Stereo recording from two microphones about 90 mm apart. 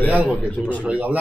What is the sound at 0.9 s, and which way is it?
Speech, 15° right (ahead or behind).